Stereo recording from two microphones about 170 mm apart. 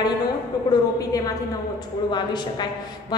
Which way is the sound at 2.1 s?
25° left (ahead or behind).